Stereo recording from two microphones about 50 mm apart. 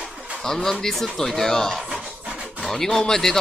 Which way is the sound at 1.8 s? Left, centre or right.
Centre.